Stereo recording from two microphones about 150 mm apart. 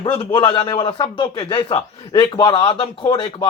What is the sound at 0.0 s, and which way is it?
A man's voice, 35° left (ahead or behind).